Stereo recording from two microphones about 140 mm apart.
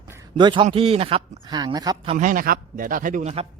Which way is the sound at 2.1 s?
65° right (ahead or behind).